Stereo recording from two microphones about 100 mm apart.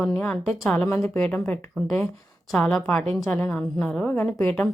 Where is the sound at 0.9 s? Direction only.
25° left (ahead or behind).